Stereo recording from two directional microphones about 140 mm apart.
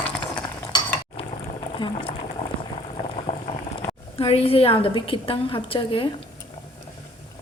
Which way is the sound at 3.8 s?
45° left (ahead or behind).